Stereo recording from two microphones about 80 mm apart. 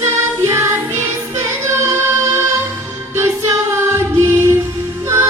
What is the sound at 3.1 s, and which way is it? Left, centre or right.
Music, right.